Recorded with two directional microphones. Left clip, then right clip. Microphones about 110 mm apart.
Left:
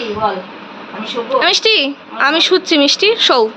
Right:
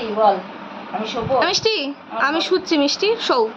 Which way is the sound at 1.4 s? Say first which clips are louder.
Left 7 dB; 25° left (ahead or behind).